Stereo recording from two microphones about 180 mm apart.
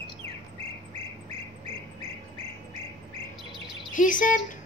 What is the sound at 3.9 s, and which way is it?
Speech, 45° left (ahead or behind).